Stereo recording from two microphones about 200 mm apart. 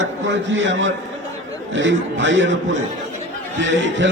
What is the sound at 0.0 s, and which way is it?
A man's voice, 70° right (ahead or behind).